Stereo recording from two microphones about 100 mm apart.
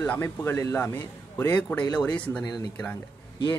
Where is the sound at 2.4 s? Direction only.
40° left (ahead or behind).